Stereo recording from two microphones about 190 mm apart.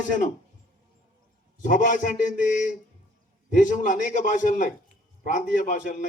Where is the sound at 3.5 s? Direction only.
40° left (ahead or behind).